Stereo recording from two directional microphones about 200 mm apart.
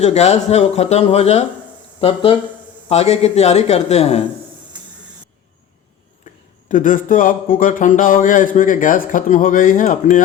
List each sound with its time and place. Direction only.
0.0 s speech: 35° left (ahead or behind)
6.7 s speech: 40° left (ahead or behind)